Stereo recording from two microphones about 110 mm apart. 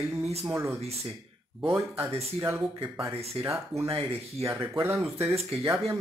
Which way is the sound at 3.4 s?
25° right (ahead or behind).